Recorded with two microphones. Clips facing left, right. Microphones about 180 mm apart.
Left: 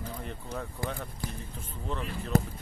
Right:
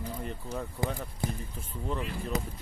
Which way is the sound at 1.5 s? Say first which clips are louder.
Even; 10° right (ahead or behind).